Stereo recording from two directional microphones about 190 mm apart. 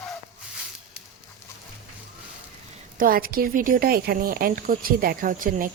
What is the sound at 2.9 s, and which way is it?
Speech, 50° right (ahead or behind).